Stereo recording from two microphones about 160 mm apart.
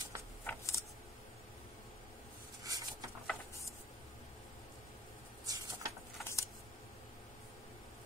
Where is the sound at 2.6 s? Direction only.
20° right (ahead or behind).